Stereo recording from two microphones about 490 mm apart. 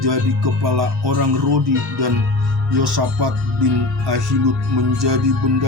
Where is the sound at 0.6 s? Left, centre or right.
Right.